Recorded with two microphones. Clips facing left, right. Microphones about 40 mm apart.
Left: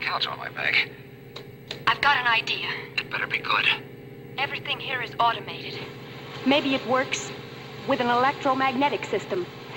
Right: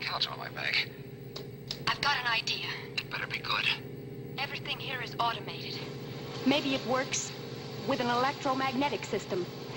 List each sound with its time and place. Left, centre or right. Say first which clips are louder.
0.0 s speech: left 7 dB; left
1.9 s speech: left 9 dB; left
6.4 s speech: left 6 dB; left